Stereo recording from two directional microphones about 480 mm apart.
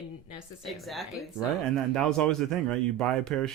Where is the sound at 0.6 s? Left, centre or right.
Centre.